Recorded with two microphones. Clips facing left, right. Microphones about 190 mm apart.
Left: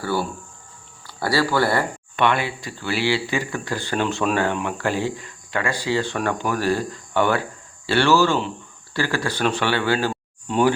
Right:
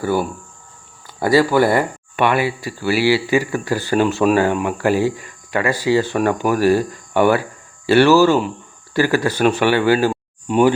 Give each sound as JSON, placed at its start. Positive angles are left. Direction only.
{"t": 0.0, "sound": "speech", "side_deg": -15}